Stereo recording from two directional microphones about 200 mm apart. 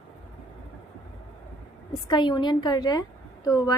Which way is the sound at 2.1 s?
25° left (ahead or behind).